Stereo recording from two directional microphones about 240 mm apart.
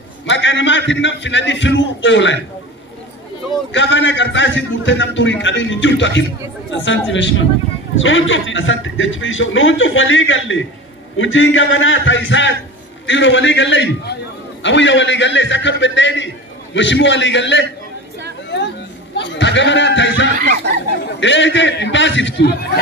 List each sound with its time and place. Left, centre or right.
0.3 s a man's voice: left
3.7 s a man's voice: left
19.1 s speech: left
20.4 s speech: right
21.2 s a man's voice: left